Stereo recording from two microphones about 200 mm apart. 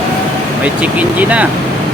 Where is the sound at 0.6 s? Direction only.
5° right (ahead or behind).